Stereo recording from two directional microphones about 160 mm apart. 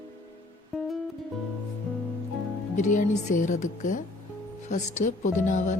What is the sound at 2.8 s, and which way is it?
Speech, 50° left (ahead or behind).